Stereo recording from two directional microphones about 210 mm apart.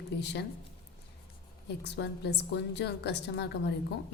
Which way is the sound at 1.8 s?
55° left (ahead or behind).